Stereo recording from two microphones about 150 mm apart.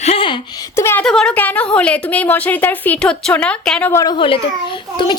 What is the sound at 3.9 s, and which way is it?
Speech, 20° left (ahead or behind).